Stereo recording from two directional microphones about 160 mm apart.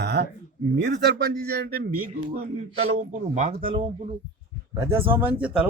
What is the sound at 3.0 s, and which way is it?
Speech, 50° right (ahead or behind).